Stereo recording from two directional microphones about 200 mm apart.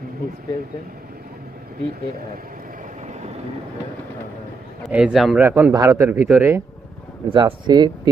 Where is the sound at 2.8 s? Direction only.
35° right (ahead or behind).